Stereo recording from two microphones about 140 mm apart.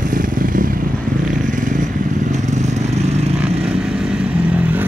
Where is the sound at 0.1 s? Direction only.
75° right (ahead or behind).